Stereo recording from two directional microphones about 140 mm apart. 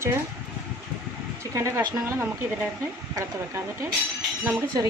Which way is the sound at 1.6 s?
20° right (ahead or behind).